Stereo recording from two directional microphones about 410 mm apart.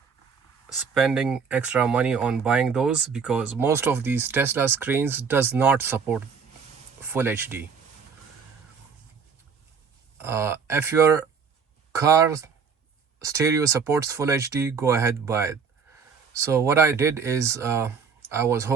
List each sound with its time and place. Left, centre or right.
0.9 s speech: centre
10.2 s speech: centre